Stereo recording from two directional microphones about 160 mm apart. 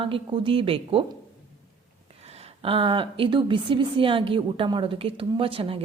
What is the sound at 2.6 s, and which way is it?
A woman's voice, 35° right (ahead or behind).